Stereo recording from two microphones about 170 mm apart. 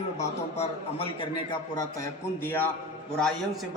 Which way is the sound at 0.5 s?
35° left (ahead or behind).